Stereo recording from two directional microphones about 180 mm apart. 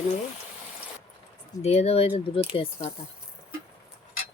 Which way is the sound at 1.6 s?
35° left (ahead or behind).